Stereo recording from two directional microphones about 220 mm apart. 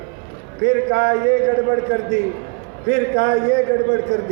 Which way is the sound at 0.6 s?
55° right (ahead or behind).